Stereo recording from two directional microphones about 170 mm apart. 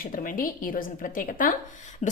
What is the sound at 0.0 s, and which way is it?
A woman's voice, 55° left (ahead or behind).